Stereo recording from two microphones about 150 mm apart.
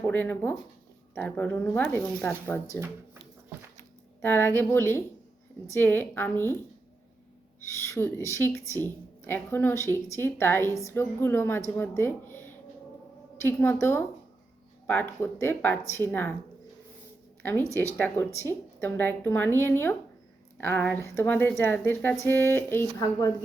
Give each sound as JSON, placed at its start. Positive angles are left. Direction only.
{"t": 0.1, "sound": "speech", "side_deg": 10}
{"t": 4.2, "sound": "speech", "side_deg": 15}
{"t": 7.7, "sound": "speech", "side_deg": 20}
{"t": 17.9, "sound": "speech", "side_deg": 15}